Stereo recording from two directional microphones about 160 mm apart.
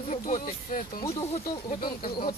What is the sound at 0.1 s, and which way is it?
Speech, 50° left (ahead or behind).